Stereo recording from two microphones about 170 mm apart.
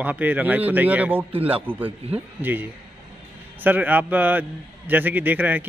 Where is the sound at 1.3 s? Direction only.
35° right (ahead or behind).